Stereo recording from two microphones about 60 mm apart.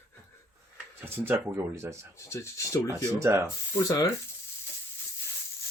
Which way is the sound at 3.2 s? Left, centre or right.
Right.